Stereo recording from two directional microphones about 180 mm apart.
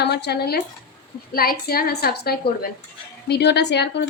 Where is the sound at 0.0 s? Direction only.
65° left (ahead or behind).